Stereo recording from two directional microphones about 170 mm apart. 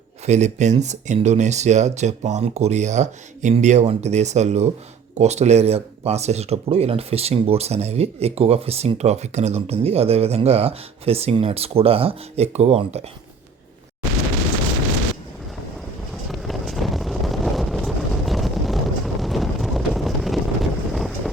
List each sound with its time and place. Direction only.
0.3 s speech: 40° right (ahead or behind)
16.3 s wind noise: centre (ahead or behind)